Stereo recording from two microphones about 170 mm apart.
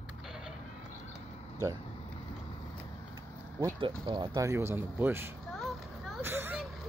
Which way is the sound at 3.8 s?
30° right (ahead or behind).